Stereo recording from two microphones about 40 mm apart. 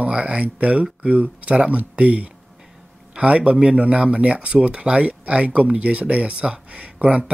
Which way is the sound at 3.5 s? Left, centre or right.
Right.